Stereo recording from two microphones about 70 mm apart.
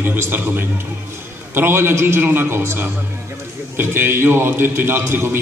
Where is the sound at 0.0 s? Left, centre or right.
Right.